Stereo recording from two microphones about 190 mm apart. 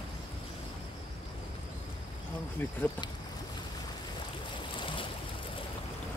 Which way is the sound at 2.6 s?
10° left (ahead or behind).